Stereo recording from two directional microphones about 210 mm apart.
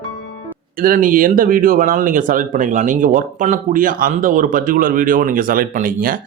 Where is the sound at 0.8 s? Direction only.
40° right (ahead or behind).